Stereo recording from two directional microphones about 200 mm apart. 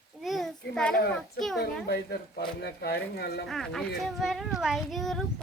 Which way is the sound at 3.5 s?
Centre (ahead or behind).